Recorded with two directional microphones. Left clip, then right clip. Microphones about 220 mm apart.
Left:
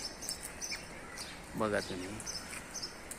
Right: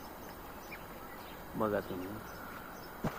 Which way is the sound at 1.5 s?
25° left (ahead or behind).